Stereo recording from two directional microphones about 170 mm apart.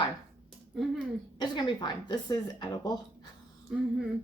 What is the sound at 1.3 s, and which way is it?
A woman's voice, 25° left (ahead or behind).